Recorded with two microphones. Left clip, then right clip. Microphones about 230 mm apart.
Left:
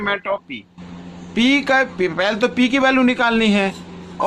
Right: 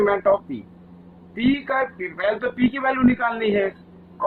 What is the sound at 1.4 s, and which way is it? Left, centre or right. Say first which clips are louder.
A man's voice: left 6 dB; left.